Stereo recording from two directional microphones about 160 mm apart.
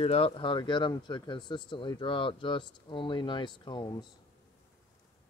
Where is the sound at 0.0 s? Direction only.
40° left (ahead or behind).